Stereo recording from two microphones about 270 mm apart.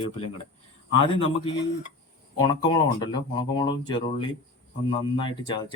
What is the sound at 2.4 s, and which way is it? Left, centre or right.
Speech, centre.